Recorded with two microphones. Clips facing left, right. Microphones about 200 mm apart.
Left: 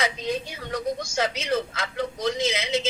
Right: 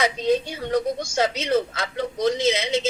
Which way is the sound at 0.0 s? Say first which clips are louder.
Right 6 dB; 30° right (ahead or behind).